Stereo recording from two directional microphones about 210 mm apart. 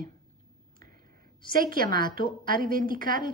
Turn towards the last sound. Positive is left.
turn(degrees=-45)  # may be behind; listen again after turning